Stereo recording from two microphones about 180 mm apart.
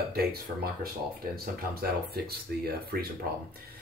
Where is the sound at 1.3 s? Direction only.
55° right (ahead or behind).